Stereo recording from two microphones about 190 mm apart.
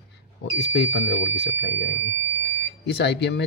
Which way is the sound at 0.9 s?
80° left.